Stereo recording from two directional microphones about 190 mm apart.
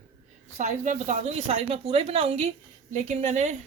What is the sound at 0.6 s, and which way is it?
A woman's voice, 40° right (ahead or behind).